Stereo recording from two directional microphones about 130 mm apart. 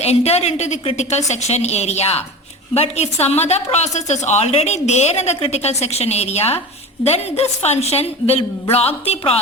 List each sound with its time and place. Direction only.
0.0 s a woman's voice: 55° left (ahead or behind)